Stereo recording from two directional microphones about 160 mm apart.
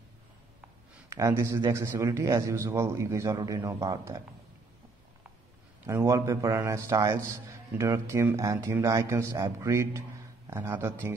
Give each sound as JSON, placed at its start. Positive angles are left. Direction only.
{"t": 1.1, "sound": "a man's voice", "side_deg": -20}
{"t": 5.9, "sound": "a man's voice", "side_deg": -20}